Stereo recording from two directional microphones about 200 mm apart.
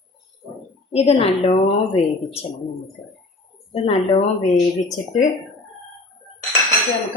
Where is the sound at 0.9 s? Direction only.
30° left (ahead or behind).